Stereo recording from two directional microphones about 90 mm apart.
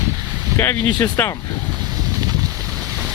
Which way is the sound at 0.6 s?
25° left (ahead or behind).